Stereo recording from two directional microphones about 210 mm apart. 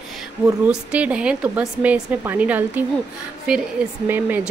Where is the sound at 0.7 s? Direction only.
5° right (ahead or behind).